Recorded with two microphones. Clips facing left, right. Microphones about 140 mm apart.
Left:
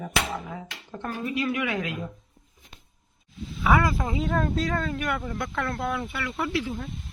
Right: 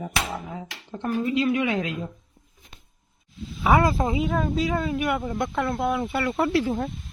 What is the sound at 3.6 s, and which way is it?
Speech, 25° right (ahead or behind).